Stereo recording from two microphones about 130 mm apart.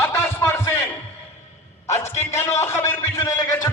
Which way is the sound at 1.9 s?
60° left (ahead or behind).